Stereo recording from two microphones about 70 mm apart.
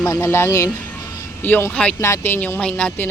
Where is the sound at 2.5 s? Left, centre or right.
Centre.